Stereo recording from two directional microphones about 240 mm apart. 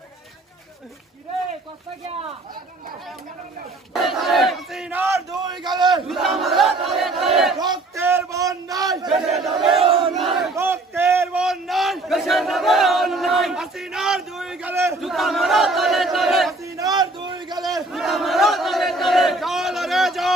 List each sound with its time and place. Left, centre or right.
3.9 s battle cry: centre
6.1 s battle cry: centre
7.6 s a sound: centre
9.3 s battle cry: centre
9.8 s battle cry: right
10.2 s battle cry: centre
10.5 s a sound: centre
15.1 s battle cry: centre
16.6 s a sound: centre
17.9 s battle cry: centre